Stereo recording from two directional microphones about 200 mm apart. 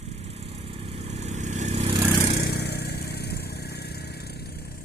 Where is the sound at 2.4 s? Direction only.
55° left (ahead or behind).